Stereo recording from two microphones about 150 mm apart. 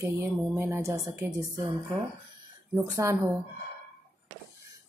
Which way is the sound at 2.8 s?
20° right (ahead or behind).